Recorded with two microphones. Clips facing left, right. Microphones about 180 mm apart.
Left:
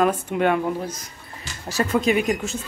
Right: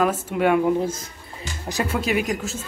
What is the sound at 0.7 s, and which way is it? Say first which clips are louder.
Speech: right 5 dB; 25° right (ahead or behind).